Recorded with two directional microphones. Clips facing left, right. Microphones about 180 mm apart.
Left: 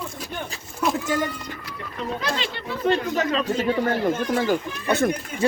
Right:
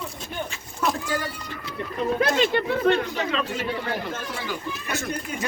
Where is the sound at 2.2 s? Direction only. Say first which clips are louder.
Right 10 dB; 45° right (ahead or behind).